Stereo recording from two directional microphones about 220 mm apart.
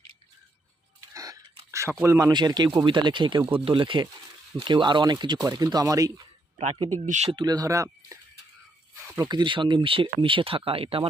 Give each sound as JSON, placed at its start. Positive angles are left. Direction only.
{"t": 1.1, "sound": "chewing", "side_deg": -15}
{"t": 1.7, "sound": "speech", "side_deg": -10}
{"t": 6.6, "sound": "speech", "side_deg": -30}
{"t": 7.3, "sound": "speech", "side_deg": -20}